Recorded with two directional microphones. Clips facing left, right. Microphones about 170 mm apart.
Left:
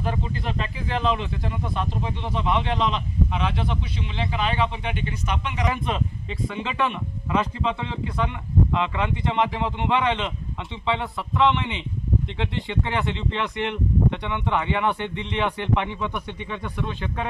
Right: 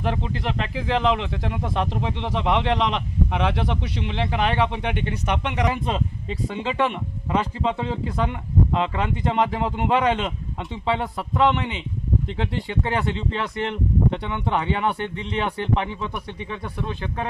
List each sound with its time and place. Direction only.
0.0 s speech: 75° right (ahead or behind)
5.7 s speech: 30° right (ahead or behind)